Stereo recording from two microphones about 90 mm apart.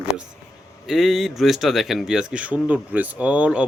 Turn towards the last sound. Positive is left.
turn(degrees=-15)  # may be behind; listen again after turning